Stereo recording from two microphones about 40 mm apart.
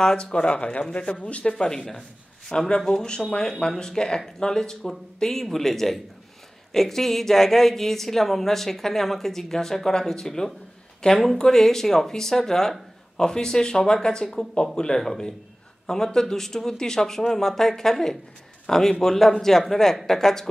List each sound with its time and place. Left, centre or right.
0.0 s speech: left
1.6 s speech: left